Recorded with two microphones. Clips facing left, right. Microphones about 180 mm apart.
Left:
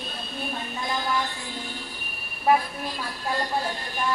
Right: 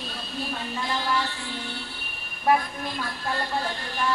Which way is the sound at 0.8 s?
15° left (ahead or behind).